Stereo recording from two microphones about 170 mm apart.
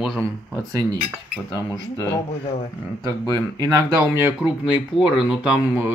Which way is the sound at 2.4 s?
35° left (ahead or behind).